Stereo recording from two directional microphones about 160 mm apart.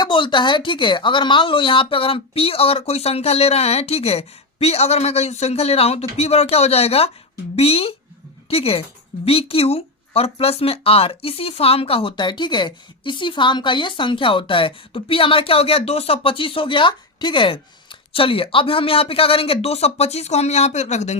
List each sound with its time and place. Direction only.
0.0 s speech: 30° left (ahead or behind); by 21.2 s 45° left (ahead or behind)